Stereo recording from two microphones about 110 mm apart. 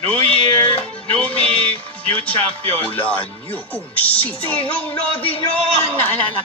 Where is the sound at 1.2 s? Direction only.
10° left (ahead or behind).